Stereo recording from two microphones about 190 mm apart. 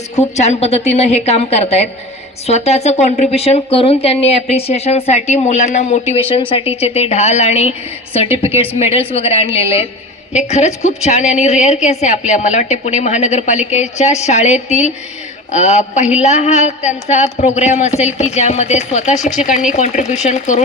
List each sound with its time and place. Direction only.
0.2 s speech: 35° left (ahead or behind)